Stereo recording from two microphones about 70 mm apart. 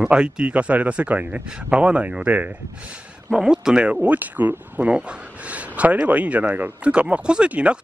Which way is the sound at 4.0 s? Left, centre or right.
Right.